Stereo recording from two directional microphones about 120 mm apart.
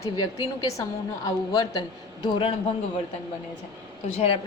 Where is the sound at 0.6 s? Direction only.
25° left (ahead or behind).